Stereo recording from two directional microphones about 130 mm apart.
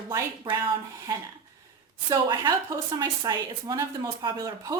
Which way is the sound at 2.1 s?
30° right (ahead or behind).